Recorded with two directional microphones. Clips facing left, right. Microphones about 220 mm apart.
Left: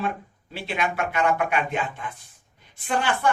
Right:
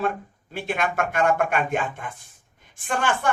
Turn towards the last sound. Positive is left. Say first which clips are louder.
# left 1 dB
turn(degrees=-50)  # may be behind; listen again after turning